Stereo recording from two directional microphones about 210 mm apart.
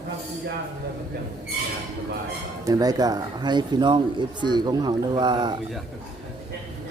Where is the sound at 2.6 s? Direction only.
15° right (ahead or behind).